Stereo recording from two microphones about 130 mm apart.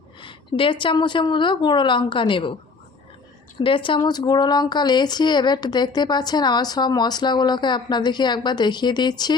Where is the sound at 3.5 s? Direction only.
40° left (ahead or behind).